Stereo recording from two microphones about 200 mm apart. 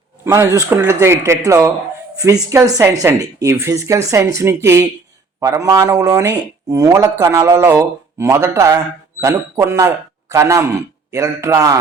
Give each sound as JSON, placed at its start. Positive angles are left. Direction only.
{"t": 0.7, "sound": "speech", "side_deg": -10}